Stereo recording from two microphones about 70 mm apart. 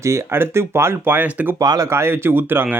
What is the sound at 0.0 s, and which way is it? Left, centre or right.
Speech, right.